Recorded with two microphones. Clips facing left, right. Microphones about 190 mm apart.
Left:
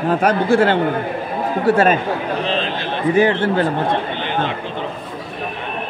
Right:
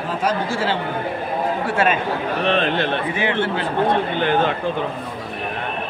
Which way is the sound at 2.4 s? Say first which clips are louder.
Right 3 dB; 60° right (ahead or behind).